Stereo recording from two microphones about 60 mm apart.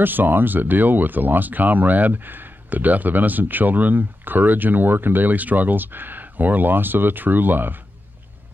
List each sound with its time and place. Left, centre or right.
0.0 s speech: right